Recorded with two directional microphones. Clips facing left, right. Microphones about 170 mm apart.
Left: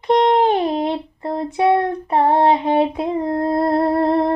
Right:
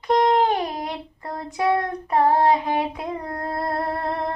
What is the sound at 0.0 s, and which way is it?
Child singing, 25° left (ahead or behind).